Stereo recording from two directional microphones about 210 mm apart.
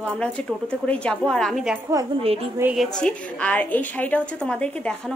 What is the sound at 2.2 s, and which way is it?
Speech, 25° right (ahead or behind).